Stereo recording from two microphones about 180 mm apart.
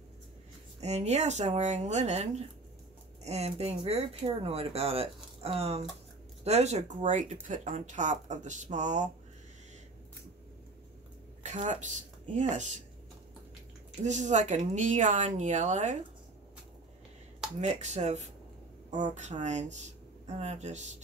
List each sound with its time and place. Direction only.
0.7 s speech: 40° right (ahead or behind)
11.4 s a woman's voice: 40° right (ahead or behind)
14.0 s speech: 40° right (ahead or behind)
17.6 s speech: 40° right (ahead or behind)